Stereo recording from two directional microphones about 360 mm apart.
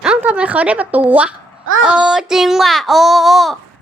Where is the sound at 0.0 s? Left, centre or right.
Centre.